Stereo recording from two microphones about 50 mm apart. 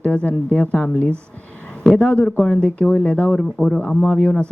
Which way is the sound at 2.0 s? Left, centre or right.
Left.